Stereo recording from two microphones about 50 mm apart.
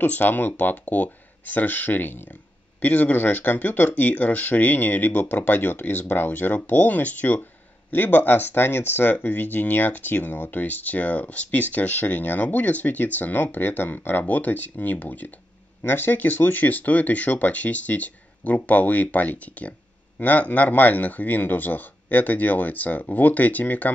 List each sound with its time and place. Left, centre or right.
0.0 s speech: left
2.8 s speech: left
7.9 s speech: left